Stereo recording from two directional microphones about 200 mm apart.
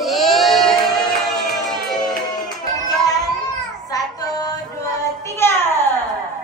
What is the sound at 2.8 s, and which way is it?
Child singing, 20° left (ahead or behind).